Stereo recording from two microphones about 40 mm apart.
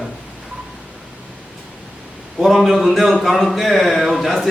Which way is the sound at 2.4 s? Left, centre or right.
Centre.